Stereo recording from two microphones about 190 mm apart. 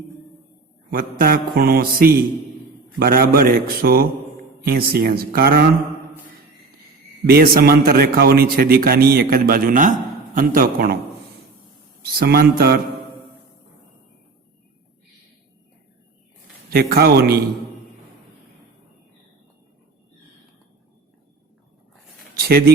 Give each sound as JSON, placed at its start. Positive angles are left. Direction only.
{"t": 0.9, "sound": "a man's voice", "side_deg": -50}
{"t": 7.3, "sound": "a man's voice", "side_deg": -55}
{"t": 12.0, "sound": "a man's voice", "side_deg": -55}
{"t": 16.6, "sound": "a man's voice", "side_deg": -55}
{"t": 22.4, "sound": "a sound", "side_deg": -55}